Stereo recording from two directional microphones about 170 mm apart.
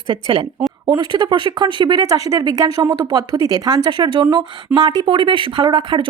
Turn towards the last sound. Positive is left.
turn(degrees=-30)  # may be behind; listen again after turning